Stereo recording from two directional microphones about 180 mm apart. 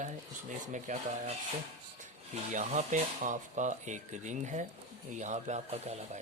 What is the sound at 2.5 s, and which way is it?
Speech, 40° right (ahead or behind).